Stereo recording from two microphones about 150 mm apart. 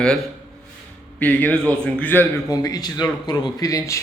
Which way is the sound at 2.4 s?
25° left (ahead or behind).